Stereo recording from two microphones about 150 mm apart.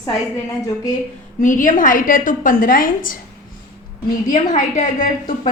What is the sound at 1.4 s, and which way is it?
A woman's voice, 60° left (ahead or behind).